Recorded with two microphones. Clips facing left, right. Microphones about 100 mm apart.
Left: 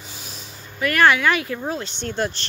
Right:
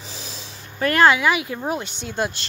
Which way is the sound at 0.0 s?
90° right.